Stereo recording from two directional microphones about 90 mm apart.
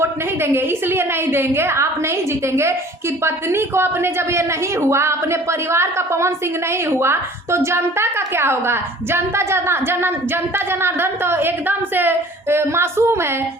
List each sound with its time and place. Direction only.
0.0 s a woman's voice: 25° right (ahead or behind)